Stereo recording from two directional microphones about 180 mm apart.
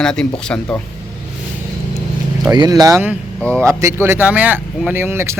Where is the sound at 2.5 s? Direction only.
20° right (ahead or behind).